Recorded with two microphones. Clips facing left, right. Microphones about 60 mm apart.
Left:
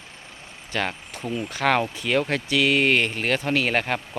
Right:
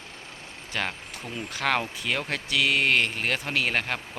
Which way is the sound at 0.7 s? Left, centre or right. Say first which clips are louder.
Left 4 dB; centre.